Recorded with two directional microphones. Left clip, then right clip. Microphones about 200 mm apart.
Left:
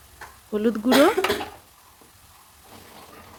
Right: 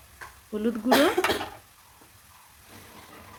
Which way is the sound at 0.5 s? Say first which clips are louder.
Left 6 dB; 45° left (ahead or behind).